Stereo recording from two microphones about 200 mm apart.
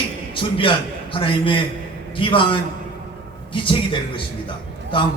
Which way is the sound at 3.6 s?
25° left (ahead or behind).